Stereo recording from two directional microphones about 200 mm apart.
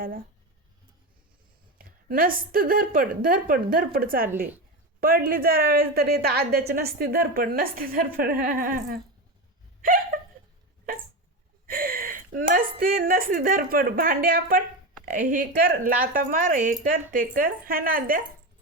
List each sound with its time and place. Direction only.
0.0 s a woman's voice: 45° right (ahead or behind)
1.8 s a woman's voice: 45° right (ahead or behind)
4.3 s a woman's voice: 10° right (ahead or behind)
4.9 s a woman's voice: 45° right (ahead or behind)
9.8 s a sound: 45° right (ahead or behind)
11.6 s a woman's voice: 45° right (ahead or behind)